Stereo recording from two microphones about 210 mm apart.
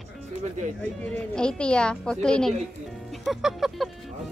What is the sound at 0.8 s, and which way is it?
Speech, 5° left (ahead or behind).